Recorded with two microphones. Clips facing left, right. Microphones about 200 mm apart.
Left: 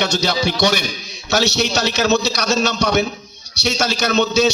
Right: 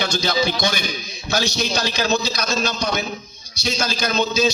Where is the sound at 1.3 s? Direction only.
70° left (ahead or behind).